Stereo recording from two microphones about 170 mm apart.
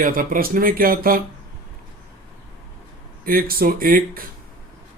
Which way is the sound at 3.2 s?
60° right (ahead or behind).